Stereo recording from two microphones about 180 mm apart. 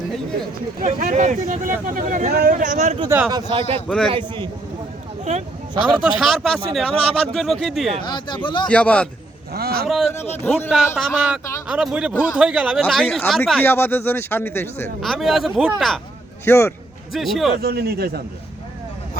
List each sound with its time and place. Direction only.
0.8 s speech: 45° right (ahead or behind)
3.5 s a man's voice: 30° right (ahead or behind)
3.8 s speech: 5° left (ahead or behind)
6.0 s speech: centre (ahead or behind)
8.0 s speech: 25° left (ahead or behind)
8.6 s speech: 5° left (ahead or behind)
9.5 s a man's voice: 60° right (ahead or behind)
9.8 s speech: centre (ahead or behind)
10.4 s speech: 10° left (ahead or behind)
10.7 s speech: 5° right (ahead or behind); by 14.8 s 10° left (ahead or behind)
15.0 s speech: centre (ahead or behind)
16.5 s speech: 15° left (ahead or behind)
17.1 s speech: centre (ahead or behind)
17.6 s a man's voice: 60° right (ahead or behind)